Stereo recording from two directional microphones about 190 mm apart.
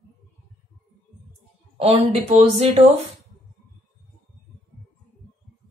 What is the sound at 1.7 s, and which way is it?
Speech, 30° right (ahead or behind).